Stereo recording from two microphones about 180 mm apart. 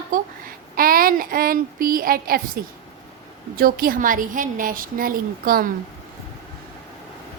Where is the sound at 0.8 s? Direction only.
55° right (ahead or behind).